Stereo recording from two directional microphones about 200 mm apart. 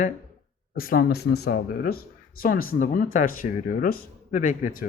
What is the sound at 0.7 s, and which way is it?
Speech, 45° left (ahead or behind).